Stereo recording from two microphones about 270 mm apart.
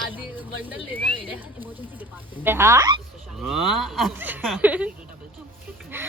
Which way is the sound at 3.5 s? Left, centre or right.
Centre.